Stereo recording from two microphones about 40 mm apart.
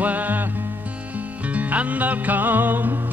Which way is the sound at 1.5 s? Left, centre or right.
Right.